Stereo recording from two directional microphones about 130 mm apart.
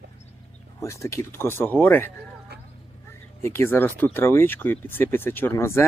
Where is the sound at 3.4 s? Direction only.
20° left (ahead or behind).